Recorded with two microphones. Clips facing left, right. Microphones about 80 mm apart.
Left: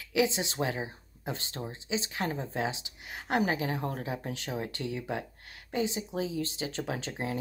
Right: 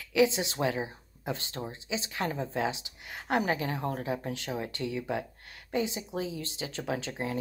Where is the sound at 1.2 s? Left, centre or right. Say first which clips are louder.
Right 2 dB; right.